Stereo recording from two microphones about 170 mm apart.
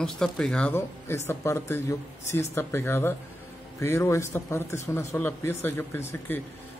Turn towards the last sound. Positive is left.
turn(degrees=15)  # may be behind; listen again after turning